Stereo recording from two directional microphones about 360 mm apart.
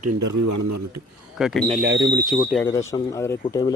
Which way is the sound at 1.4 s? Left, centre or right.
Centre.